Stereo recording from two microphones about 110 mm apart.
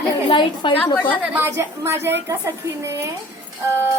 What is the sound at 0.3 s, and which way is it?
Speech, 45° left (ahead or behind).